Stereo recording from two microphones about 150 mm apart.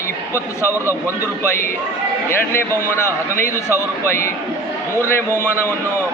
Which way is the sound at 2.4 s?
15° left (ahead or behind).